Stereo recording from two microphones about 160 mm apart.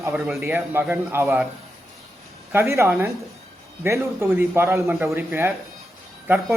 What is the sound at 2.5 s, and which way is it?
Speech, 15° right (ahead or behind).